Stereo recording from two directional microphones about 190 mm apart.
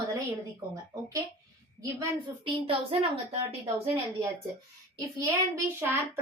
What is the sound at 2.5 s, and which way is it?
Speech, 30° right (ahead or behind).